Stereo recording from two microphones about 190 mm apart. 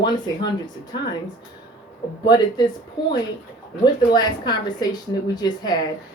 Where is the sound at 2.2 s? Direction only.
20° left (ahead or behind).